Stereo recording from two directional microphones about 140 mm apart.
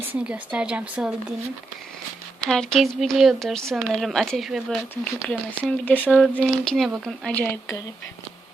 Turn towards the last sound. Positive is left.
turn(degrees=15)  # may be behind; listen again after turning